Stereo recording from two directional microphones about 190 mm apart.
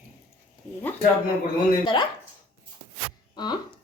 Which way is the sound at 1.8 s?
25° left (ahead or behind).